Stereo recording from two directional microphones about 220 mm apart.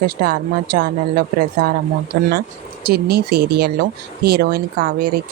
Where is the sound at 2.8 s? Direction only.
45° right (ahead or behind).